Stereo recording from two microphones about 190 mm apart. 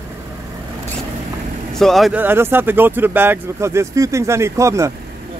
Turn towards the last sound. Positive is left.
turn(degrees=-15)  # may be behind; listen again after turning